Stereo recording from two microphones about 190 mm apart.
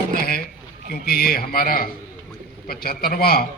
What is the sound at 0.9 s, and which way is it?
A man's voice, 50° left (ahead or behind).